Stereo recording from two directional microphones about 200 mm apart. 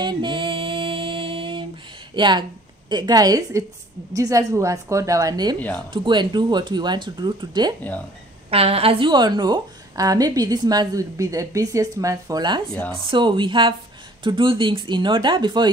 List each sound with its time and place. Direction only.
0.0 s music: 20° right (ahead or behind)
2.1 s a woman's voice: 25° right (ahead or behind)